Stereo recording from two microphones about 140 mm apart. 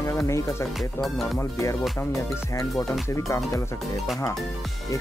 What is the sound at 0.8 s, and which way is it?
Music, centre (ahead or behind).